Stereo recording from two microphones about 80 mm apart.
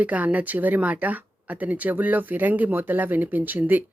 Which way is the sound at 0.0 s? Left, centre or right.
Centre.